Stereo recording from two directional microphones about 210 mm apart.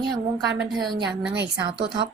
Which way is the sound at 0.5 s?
Centre (ahead or behind).